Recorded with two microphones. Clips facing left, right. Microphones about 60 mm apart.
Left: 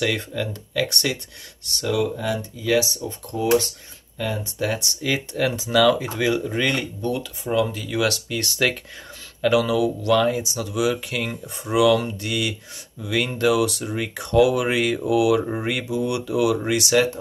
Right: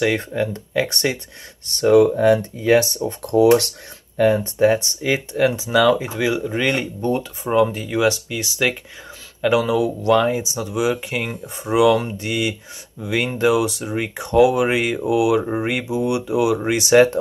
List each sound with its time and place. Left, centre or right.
0.0 s speech: right
1.7 s speech: right
3.3 s speech: right
4.2 s speech: right
7.1 s speech: right; by 8.7 s centre
9.4 s speech: right